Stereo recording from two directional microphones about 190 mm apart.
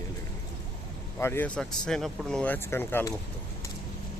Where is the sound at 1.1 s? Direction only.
10° left (ahead or behind).